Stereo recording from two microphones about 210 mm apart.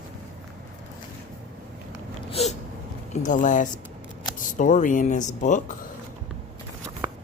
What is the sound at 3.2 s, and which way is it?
Speech, 35° left (ahead or behind).